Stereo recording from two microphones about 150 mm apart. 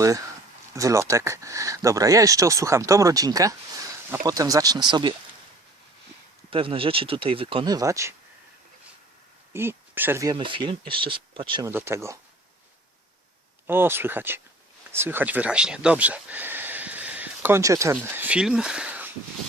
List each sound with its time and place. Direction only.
0.7 s speech: 20° right (ahead or behind)
6.5 s speech: 35° right (ahead or behind); by 8.1 s 20° right (ahead or behind)
9.5 s speech: 15° right (ahead or behind)
10.3 s speech: 35° right (ahead or behind)
11.6 s speech: 15° right (ahead or behind)
13.7 s speech: 15° right (ahead or behind)